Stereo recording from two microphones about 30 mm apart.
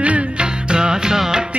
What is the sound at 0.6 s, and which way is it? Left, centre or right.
Music, right.